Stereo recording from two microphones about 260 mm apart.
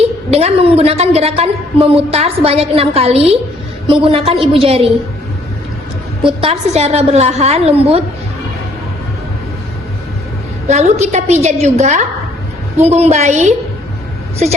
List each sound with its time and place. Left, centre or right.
0.0 s a woman's voice: right
6.4 s a woman's voice: right
10.7 s a woman's voice: right